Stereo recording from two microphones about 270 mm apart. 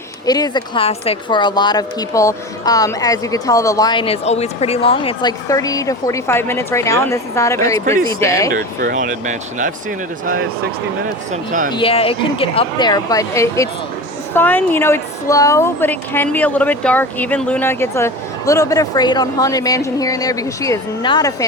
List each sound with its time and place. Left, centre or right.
0.3 s a woman's voice: centre
8.5 s speech: right
11.3 s speech: right
11.7 s a woman's voice: centre